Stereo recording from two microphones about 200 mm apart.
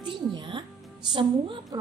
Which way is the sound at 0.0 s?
20° right (ahead or behind).